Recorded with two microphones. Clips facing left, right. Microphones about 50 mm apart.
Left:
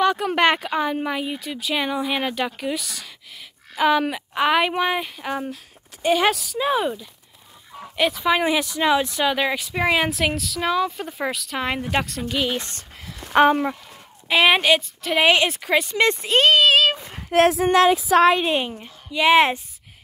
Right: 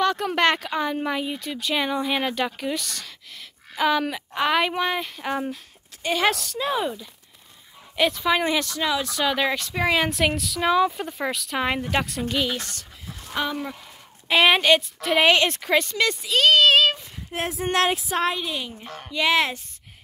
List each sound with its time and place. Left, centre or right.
0.0 s speech: centre
8.8 s speech: left
9.2 s speech: centre
12.5 s speech: left
13.2 s speech: left
14.3 s speech: centre
15.9 s speech: left
16.5 s a sound: centre
17.3 s speech: left
18.4 s speech: left
19.1 s speech: left